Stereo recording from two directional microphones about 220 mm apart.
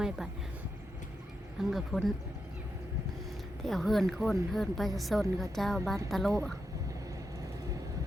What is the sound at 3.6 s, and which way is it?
Speech, centre (ahead or behind).